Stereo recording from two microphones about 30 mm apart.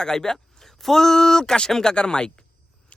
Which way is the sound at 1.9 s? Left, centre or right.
Left.